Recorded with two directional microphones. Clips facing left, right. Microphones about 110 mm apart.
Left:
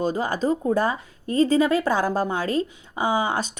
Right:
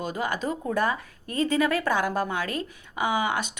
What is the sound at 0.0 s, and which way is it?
A woman's voice, 35° left (ahead or behind).